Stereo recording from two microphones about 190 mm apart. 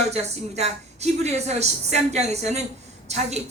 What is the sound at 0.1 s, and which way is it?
Speech, 35° right (ahead or behind).